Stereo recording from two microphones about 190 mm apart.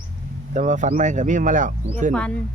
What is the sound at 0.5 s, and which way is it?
Speech, 40° right (ahead or behind).